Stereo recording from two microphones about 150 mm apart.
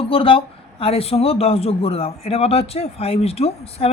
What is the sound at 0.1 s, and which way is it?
Speech, 35° left (ahead or behind).